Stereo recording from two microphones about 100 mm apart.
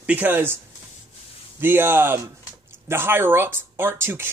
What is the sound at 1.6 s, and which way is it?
Speech, 20° right (ahead or behind).